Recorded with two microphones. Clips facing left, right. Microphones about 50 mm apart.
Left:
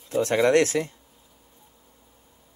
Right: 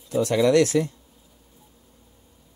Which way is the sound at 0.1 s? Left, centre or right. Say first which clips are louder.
Right 1 dB; left.